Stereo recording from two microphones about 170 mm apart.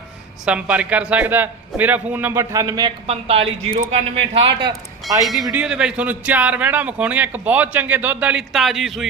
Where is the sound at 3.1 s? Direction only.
35° right (ahead or behind).